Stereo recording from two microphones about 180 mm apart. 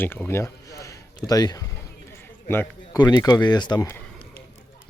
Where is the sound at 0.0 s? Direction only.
10° left (ahead or behind).